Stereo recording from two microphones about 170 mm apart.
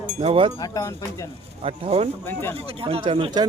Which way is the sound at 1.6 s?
35° right (ahead or behind).